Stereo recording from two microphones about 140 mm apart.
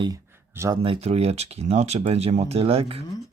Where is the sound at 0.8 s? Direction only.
45° right (ahead or behind).